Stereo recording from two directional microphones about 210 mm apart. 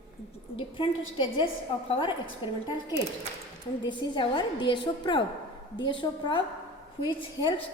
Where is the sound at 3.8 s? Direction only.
20° left (ahead or behind).